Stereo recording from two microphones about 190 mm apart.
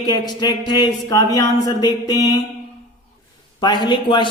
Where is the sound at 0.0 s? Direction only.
20° left (ahead or behind).